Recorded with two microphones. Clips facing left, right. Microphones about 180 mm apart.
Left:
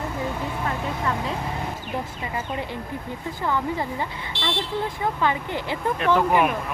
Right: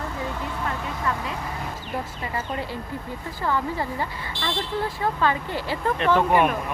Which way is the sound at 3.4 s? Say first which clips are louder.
Even; 15° left (ahead or behind).